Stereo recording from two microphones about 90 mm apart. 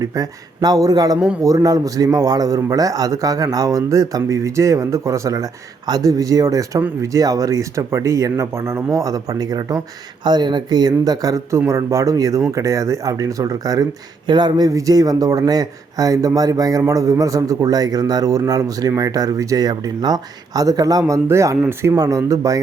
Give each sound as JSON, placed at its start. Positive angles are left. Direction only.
{"t": 0.0, "sound": "speech", "side_deg": -45}
{"t": 10.2, "sound": "speech", "side_deg": -55}
{"t": 14.3, "sound": "speech", "side_deg": -55}
{"t": 14.7, "sound": "speech", "side_deg": -40}
{"t": 21.9, "sound": "speech", "side_deg": -40}